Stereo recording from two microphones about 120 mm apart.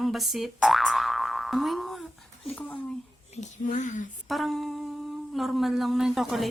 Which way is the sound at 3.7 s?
90° left.